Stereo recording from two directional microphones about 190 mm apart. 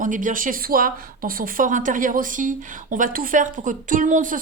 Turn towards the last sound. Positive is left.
turn(degrees=-45)  # may be behind; listen again after turning